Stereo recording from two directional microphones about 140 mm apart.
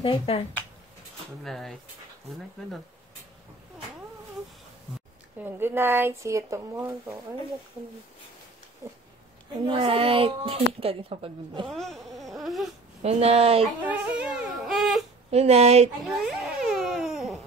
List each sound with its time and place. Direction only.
0.0 s speech: 35° left (ahead or behind)
1.4 s speech: centre (ahead or behind)
5.4 s speech: 15° right (ahead or behind)
8.8 s speech: 25° right (ahead or behind)
9.7 s a woman's voice: 40° right (ahead or behind)
11.6 s a sound: centre (ahead or behind)
13.0 s speech: 45° right (ahead or behind)
13.8 s baby cry: 10° right (ahead or behind)
15.3 s speech: 50° right (ahead or behind)
16.0 s crying: centre (ahead or behind)